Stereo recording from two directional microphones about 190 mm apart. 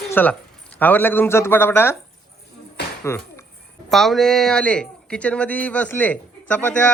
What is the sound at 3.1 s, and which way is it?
Speech, 15° left (ahead or behind).